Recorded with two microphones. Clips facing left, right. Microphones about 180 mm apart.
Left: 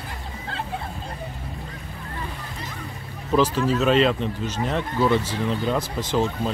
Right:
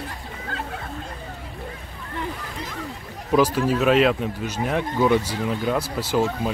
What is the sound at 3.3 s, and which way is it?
Speech, 10° right (ahead or behind).